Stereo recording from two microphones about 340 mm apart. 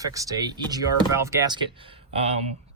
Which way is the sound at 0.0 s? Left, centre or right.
Centre.